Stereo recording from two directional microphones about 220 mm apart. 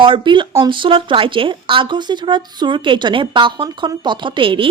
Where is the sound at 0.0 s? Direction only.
20° right (ahead or behind).